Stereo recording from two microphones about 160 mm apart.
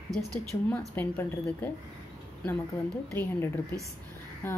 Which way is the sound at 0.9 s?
15° left (ahead or behind).